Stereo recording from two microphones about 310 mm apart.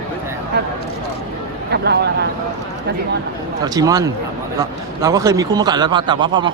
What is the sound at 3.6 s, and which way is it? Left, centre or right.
A man's voice, centre.